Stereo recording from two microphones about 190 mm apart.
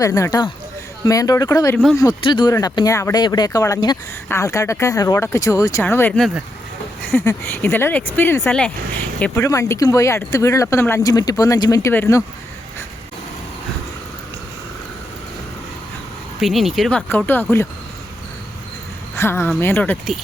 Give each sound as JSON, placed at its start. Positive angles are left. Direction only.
{"t": 0.0, "sound": "speech", "side_deg": 15}
{"t": 16.4, "sound": "speech", "side_deg": 0}
{"t": 19.1, "sound": "speech", "side_deg": 15}